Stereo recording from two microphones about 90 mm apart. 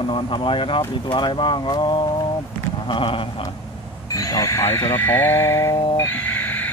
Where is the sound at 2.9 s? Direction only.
75° left (ahead or behind).